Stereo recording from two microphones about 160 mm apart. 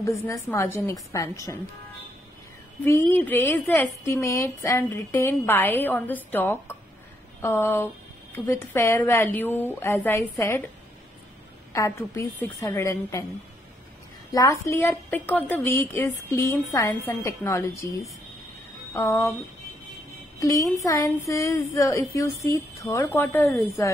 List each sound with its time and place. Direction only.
0.0 s a woman's voice: 15° left (ahead or behind)
2.8 s a woman's voice: 15° left (ahead or behind)
11.7 s a woman's voice: 20° left (ahead or behind)
14.3 s a woman's voice: 20° left (ahead or behind)
18.9 s a woman's voice: 15° left (ahead or behind)
20.3 s a woman's voice: 20° left (ahead or behind)